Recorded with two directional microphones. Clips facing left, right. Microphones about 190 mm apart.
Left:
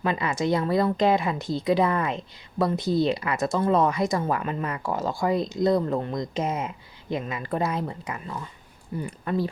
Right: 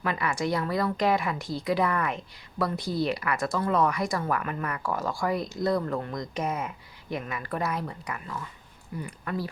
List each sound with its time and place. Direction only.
0.0 s a woman's voice: 25° left (ahead or behind)